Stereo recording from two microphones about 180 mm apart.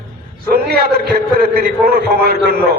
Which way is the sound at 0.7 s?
60° right (ahead or behind).